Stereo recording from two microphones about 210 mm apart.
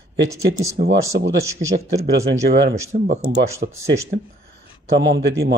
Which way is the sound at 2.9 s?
35° right (ahead or behind).